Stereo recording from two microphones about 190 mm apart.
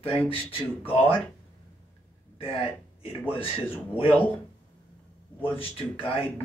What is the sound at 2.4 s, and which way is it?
Speech, 30° left (ahead or behind).